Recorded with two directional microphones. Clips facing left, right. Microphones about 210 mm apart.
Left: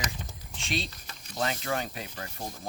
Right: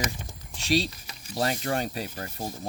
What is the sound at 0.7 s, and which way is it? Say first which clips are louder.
Speech: right 8 dB; 35° right (ahead or behind).